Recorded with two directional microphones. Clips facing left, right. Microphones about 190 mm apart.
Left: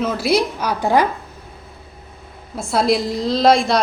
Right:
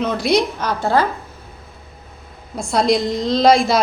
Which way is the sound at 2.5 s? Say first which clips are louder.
Right 1 dB; 5° left (ahead or behind).